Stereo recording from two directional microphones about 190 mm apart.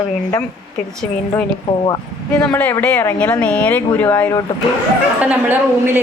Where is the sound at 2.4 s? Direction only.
10° left (ahead or behind).